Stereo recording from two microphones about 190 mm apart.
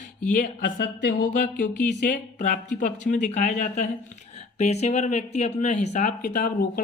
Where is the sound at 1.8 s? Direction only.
40° left (ahead or behind).